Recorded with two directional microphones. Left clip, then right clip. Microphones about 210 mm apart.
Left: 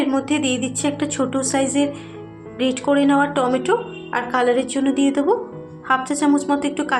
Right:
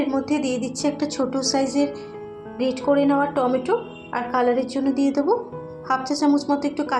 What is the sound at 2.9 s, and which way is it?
A woman's voice, 25° left (ahead or behind).